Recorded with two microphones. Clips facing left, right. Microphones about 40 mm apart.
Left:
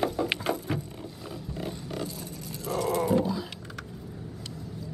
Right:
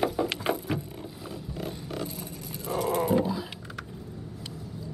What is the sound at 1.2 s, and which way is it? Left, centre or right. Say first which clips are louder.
Roaring cats: even; centre.